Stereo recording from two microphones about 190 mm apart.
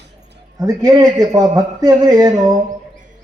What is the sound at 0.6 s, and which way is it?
A man's voice, 20° right (ahead or behind).